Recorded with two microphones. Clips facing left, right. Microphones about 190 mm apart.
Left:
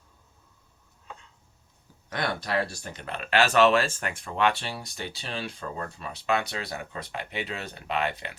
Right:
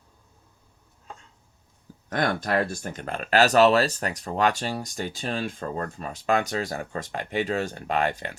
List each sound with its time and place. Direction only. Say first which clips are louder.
2.0 s speech: right 5 dB; 50° right (ahead or behind)